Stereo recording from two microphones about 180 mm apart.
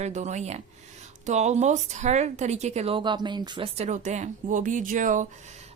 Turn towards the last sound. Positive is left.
turn(degrees=-45)  # may be behind; listen again after turning